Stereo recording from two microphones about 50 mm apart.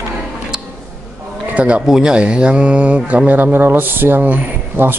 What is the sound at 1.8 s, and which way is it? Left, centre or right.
Speech, centre.